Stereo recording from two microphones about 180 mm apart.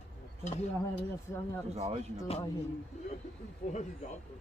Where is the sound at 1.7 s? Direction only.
35° right (ahead or behind).